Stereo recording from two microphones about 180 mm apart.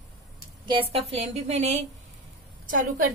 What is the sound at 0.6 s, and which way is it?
A woman's voice, 30° right (ahead or behind).